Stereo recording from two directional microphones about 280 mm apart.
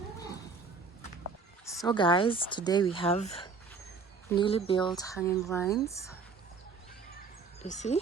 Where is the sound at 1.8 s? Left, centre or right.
Centre.